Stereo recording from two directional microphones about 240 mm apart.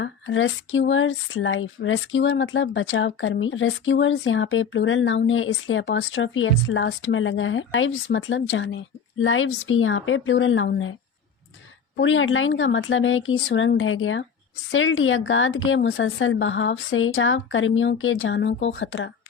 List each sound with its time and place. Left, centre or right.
0.0 s speech: left
11.9 s speech: left